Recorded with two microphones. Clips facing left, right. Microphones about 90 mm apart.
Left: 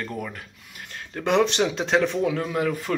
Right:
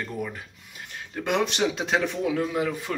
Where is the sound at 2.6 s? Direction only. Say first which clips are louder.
Left 2 dB; 15° right (ahead or behind).